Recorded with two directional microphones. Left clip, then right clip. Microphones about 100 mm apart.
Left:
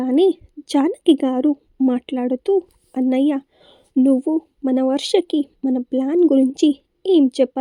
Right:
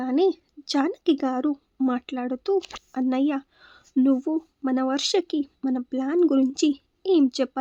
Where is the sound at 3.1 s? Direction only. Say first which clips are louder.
Left 6 dB; 35° left (ahead or behind).